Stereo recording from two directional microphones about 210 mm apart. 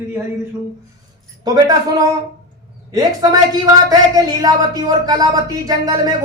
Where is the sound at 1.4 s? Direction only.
20° right (ahead or behind).